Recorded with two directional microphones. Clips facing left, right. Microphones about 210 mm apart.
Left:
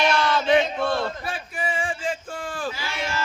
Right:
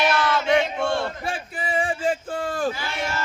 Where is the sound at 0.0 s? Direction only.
5° right (ahead or behind).